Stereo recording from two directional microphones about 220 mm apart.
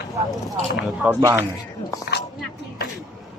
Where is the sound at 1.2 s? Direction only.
15° right (ahead or behind).